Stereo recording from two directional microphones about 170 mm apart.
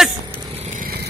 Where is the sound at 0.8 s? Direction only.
65° right (ahead or behind).